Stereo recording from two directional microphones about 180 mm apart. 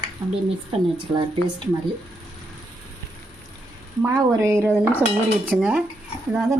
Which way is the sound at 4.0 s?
15° right (ahead or behind).